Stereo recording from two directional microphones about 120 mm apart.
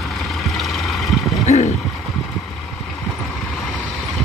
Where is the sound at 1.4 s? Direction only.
75° left (ahead or behind).